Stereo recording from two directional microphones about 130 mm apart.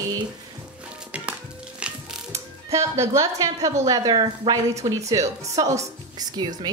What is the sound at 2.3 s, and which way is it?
Music, 20° right (ahead or behind).